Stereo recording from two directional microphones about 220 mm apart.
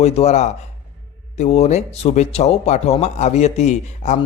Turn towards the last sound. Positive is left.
turn(degrees=30)  # may be behind; listen again after turning